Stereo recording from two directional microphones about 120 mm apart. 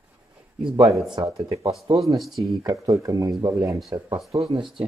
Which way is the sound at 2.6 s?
30° right (ahead or behind).